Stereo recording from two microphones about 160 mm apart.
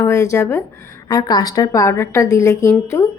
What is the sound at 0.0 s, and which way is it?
A woman's voice, 20° left (ahead or behind).